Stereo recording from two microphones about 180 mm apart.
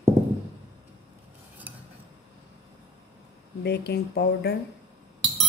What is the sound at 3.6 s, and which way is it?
Speech, 65° left (ahead or behind).